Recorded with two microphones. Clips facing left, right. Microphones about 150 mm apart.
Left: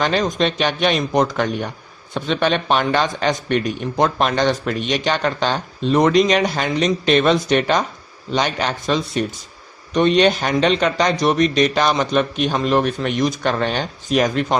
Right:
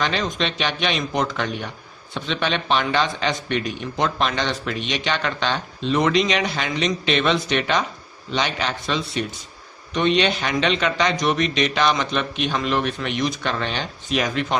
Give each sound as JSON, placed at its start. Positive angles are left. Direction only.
{"t": 0.0, "sound": "a man's voice", "side_deg": 45}